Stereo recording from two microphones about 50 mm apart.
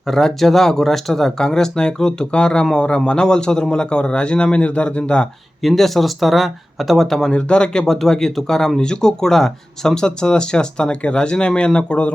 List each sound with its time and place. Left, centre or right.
0.1 s a man's voice: centre
5.6 s speech: centre
7.3 s speech: centre